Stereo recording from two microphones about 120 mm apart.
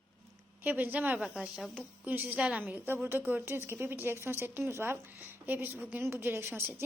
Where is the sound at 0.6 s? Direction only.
15° right (ahead or behind).